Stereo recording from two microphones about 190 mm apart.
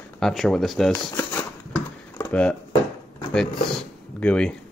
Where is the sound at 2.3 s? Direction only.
5° left (ahead or behind).